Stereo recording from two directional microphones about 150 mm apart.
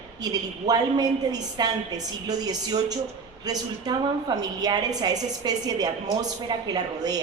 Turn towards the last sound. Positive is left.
turn(degrees=-25)  # may be behind; listen again after turning